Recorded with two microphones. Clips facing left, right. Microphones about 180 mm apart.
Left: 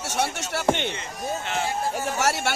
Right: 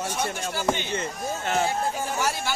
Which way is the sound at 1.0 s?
45° right (ahead or behind).